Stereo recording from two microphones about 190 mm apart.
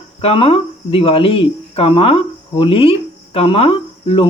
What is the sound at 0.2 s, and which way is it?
Speech, 30° left (ahead or behind).